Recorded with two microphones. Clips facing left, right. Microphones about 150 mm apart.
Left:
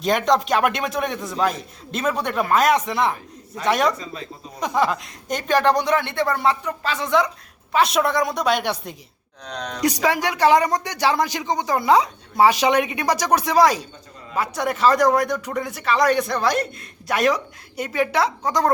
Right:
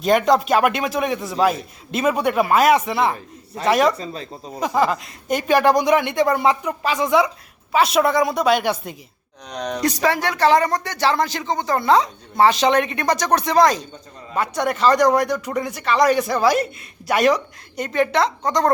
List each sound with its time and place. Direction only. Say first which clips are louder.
0.0 s speech: right 3 dB; 5° right (ahead or behind)
3.9 s speech: right 3 dB; 35° right (ahead or behind)
4.6 s speech: right 2 dB; centre (ahead or behind)
9.5 s speech: right 4 dB; 15° right (ahead or behind)
9.8 s speech: even; 15° left (ahead or behind)